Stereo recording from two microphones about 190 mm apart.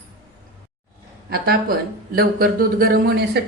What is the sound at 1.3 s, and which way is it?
Speech, 55° right (ahead or behind).